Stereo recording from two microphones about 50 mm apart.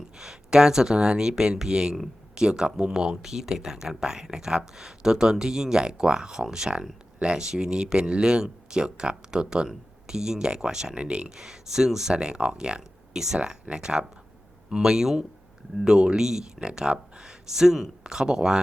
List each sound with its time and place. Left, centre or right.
0.2 s speech: centre
11.4 s speech: centre
12.1 s speech: centre